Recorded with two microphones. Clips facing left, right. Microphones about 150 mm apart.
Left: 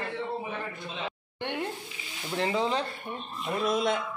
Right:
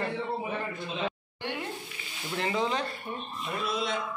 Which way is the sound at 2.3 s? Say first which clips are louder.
Left 2 dB; 30° left (ahead or behind).